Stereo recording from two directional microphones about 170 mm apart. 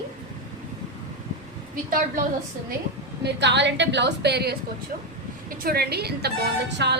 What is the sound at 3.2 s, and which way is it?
A woman's voice, 90° right.